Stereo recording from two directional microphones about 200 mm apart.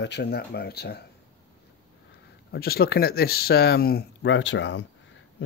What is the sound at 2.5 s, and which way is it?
Speech, 50° left (ahead or behind).